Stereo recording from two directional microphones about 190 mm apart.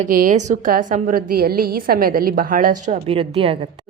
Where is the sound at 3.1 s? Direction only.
30° right (ahead or behind).